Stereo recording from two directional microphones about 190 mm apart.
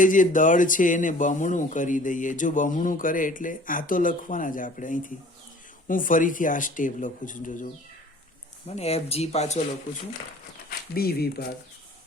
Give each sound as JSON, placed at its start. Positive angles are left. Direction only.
{"t": 0.0, "sound": "speech", "side_deg": 45}
{"t": 8.6, "sound": "speech", "side_deg": 35}
{"t": 10.7, "sound": "speech", "side_deg": 55}